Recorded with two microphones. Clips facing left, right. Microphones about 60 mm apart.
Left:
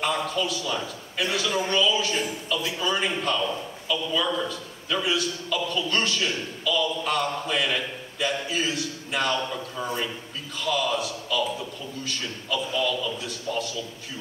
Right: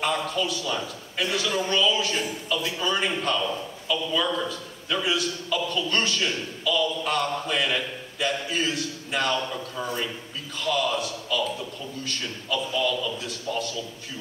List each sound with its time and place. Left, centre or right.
0.0 s a man's voice: centre